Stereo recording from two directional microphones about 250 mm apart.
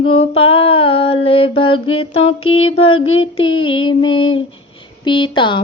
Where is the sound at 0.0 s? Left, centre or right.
Left.